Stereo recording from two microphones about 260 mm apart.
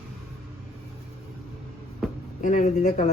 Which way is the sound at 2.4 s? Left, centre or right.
Left.